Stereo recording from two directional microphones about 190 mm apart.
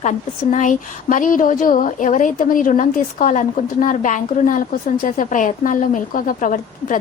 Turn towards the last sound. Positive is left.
turn(degrees=45)  # may be behind; listen again after turning